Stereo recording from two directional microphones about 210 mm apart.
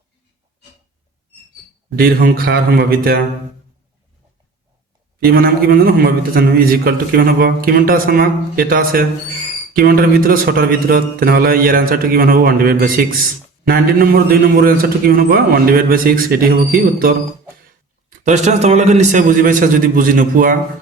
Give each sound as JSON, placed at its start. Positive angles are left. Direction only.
{"t": 2.0, "sound": "a man's voice", "side_deg": -45}
{"t": 5.2, "sound": "a man's voice", "side_deg": -45}
{"t": 18.2, "sound": "a man's voice", "side_deg": -35}